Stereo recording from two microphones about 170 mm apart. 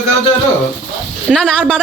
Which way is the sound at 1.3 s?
5° left (ahead or behind).